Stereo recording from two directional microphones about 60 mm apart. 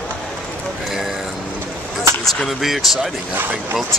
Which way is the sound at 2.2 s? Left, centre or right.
Centre.